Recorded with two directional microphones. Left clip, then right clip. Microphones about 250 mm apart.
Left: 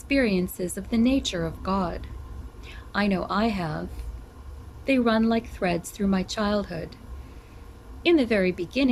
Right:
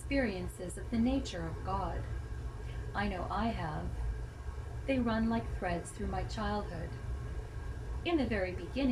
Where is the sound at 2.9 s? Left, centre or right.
Left.